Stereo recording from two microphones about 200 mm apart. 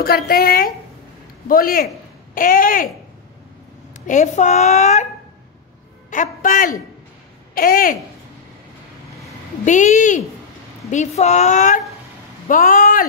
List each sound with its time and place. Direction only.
0.0 s a woman's voice: 50° left (ahead or behind)
4.1 s speech: 35° left (ahead or behind)
6.0 s a man's voice: 40° left (ahead or behind)
9.7 s speech: 40° left (ahead or behind)